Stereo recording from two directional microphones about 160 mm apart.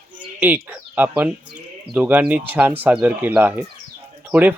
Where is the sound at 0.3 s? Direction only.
10° right (ahead or behind).